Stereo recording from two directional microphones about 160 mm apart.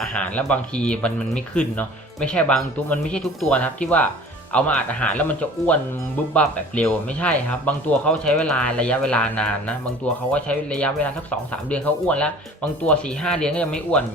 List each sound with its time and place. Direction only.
0.0 s speech: 5° left (ahead or behind)